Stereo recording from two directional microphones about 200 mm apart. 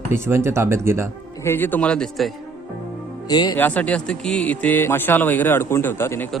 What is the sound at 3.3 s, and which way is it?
Speech, 20° left (ahead or behind).